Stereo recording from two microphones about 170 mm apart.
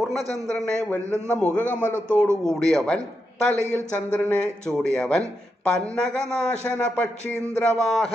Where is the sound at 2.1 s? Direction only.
15° right (ahead or behind).